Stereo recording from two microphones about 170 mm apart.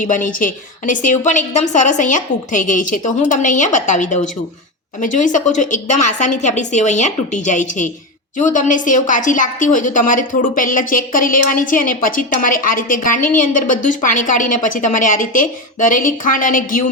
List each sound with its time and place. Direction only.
0.0 s a woman's voice: 50° left (ahead or behind)